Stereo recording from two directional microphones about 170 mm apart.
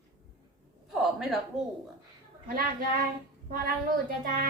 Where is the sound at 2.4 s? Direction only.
60° right (ahead or behind).